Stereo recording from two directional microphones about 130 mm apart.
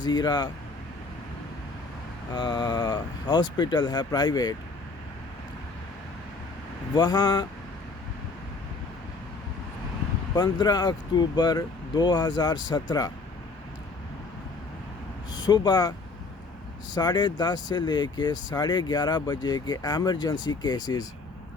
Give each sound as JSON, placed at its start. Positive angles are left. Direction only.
{"t": 0.0, "sound": "speech", "side_deg": 35}
{"t": 2.3, "sound": "speech", "side_deg": 35}
{"t": 6.9, "sound": "speech", "side_deg": 35}
{"t": 10.3, "sound": "speech", "side_deg": 35}
{"t": 15.3, "sound": "speech", "side_deg": 35}